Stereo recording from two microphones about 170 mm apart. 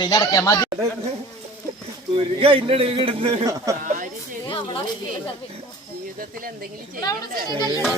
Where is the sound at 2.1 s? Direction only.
30° right (ahead or behind).